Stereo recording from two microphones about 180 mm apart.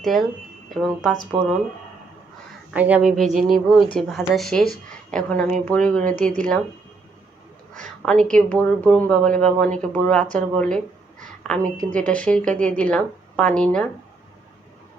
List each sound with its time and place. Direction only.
0.0 s speech: centre (ahead or behind)
2.7 s speech: 10° right (ahead or behind)
6.0 s speech: 45° right (ahead or behind)
7.7 s a woman's voice: 5° left (ahead or behind)